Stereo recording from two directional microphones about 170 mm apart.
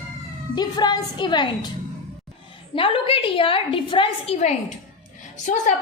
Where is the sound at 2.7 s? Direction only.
30° left (ahead or behind).